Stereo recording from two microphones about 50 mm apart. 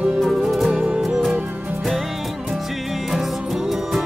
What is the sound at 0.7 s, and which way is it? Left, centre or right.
Music, centre.